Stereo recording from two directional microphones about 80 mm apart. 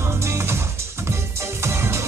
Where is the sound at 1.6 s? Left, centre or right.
Right.